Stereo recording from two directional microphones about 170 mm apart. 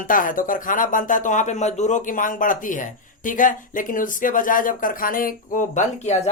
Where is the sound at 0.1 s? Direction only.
50° left (ahead or behind).